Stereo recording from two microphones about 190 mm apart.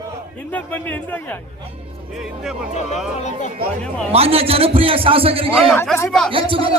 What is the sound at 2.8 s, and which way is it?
Speech, 35° left (ahead or behind).